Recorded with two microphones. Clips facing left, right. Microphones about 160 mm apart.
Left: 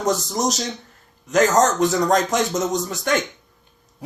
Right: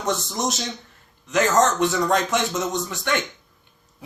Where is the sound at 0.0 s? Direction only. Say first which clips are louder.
Left 4 dB; 40° left (ahead or behind).